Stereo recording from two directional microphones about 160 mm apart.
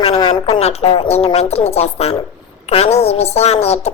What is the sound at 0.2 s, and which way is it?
A woman's voice, 30° left (ahead or behind).